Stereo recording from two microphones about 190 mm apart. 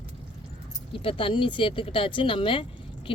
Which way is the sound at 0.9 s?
30° left (ahead or behind).